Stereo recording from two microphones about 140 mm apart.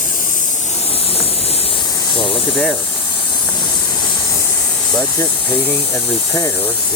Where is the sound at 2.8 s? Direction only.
35° left (ahead or behind).